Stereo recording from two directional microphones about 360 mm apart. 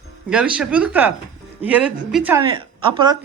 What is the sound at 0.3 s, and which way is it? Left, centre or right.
A woman's voice, centre.